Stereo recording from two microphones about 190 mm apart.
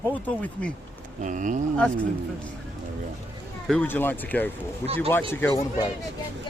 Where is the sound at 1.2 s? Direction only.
40° right (ahead or behind).